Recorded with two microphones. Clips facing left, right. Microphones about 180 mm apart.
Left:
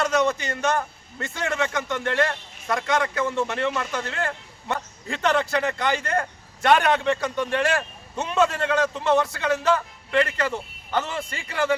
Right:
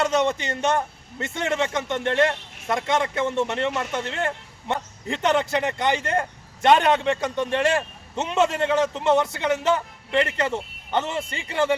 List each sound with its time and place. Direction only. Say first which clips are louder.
0.0 s speech: even; 25° right (ahead or behind)